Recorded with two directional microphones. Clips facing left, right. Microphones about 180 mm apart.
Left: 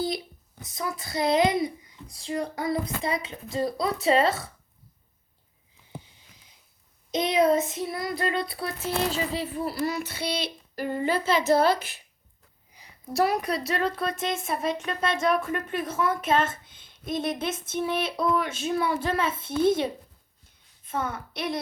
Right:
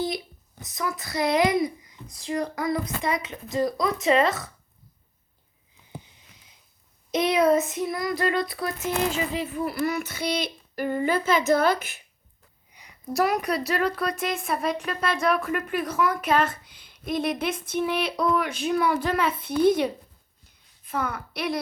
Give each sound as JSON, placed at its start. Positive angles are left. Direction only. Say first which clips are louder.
{"t": 0.7, "sound": "a woman's voice", "louder": "right 2 dB", "side_deg": 30}
{"t": 7.1, "sound": "a woman's voice", "louder": "right 1 dB", "side_deg": 25}
{"t": 7.5, "sound": "child singing", "louder": "right 2 dB", "side_deg": 25}
{"t": 12.7, "sound": "a woman's voice", "louder": "right 1 dB", "side_deg": 30}